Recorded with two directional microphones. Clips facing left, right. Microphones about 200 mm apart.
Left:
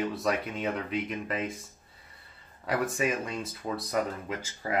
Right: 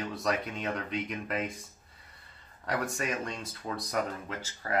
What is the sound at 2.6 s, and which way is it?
Speech, 5° left (ahead or behind).